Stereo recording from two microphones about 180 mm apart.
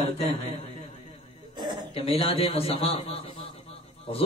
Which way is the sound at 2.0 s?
30° left (ahead or behind).